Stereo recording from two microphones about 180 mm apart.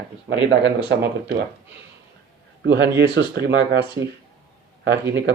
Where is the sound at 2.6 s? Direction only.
75° right (ahead or behind).